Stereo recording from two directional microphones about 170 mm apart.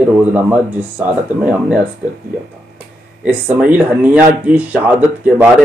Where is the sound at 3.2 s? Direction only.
10° right (ahead or behind).